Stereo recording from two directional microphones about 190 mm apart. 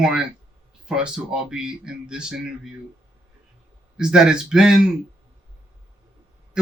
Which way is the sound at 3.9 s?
5° right (ahead or behind).